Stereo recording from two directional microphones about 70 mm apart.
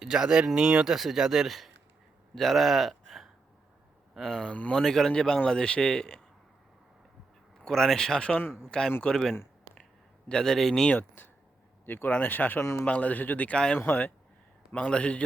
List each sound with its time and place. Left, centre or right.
0.0 s speech: centre
4.4 s a man's voice: centre
7.6 s a man's voice: centre
10.2 s a man's voice: centre
10.9 s speech: left
13.8 s speech: left
14.7 s a man's voice: centre